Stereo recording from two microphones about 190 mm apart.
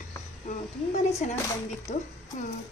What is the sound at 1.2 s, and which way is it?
Speech, 40° left (ahead or behind).